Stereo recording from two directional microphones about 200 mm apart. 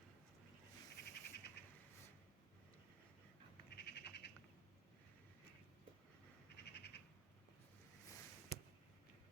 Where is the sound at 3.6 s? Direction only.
55° left (ahead or behind).